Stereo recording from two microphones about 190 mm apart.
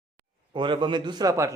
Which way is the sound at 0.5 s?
25° right (ahead or behind).